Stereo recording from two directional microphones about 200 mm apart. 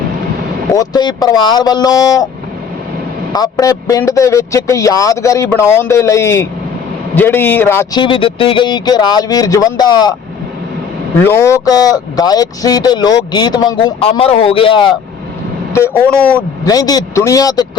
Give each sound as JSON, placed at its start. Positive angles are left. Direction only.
{"t": 0.7, "sound": "speech", "side_deg": 20}
{"t": 3.3, "sound": "speech", "side_deg": 20}
{"t": 8.0, "sound": "speech", "side_deg": 25}
{"t": 11.2, "sound": "speech", "side_deg": 10}
{"t": 15.7, "sound": "speech", "side_deg": 10}
{"t": 16.6, "sound": "speech", "side_deg": 20}